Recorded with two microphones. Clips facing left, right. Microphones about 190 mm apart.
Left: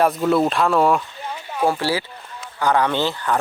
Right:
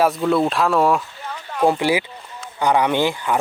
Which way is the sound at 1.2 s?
15° left (ahead or behind).